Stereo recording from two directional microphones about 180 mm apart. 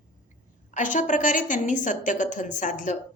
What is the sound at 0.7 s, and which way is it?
A woman's voice, 45° left (ahead or behind).